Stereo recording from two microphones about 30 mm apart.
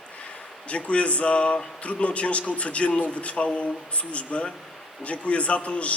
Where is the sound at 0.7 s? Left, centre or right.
Left.